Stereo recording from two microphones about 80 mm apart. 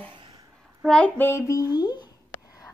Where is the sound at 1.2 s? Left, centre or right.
Left.